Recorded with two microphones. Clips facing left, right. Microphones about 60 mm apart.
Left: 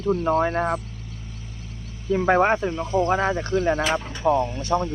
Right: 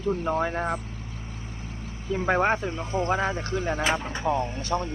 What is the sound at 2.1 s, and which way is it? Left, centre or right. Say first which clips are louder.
Speech: left 5 dB; centre.